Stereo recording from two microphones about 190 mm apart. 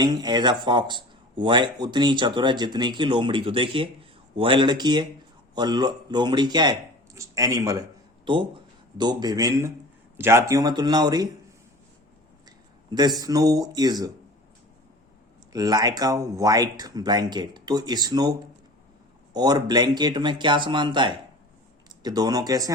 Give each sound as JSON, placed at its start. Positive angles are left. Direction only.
{"t": 0.0, "sound": "speech", "side_deg": -20}
{"t": 12.5, "sound": "speech", "side_deg": -20}
{"t": 15.5, "sound": "speech", "side_deg": -20}